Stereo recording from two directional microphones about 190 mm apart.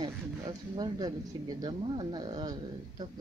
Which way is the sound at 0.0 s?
25° right (ahead or behind).